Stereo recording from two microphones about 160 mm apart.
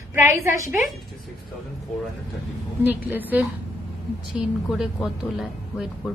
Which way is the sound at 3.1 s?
10° right (ahead or behind).